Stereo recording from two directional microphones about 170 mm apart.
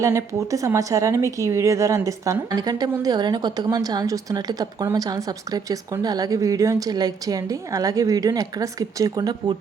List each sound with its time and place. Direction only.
0.0 s a woman's voice: 20° right (ahead or behind)